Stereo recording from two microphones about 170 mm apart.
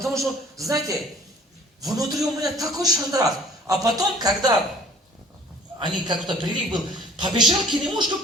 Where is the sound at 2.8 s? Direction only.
20° right (ahead or behind).